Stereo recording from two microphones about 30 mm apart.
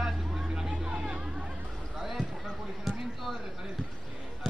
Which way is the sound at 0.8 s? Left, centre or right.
Right.